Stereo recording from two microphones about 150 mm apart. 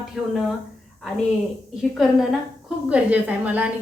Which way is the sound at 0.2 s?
5° right (ahead or behind).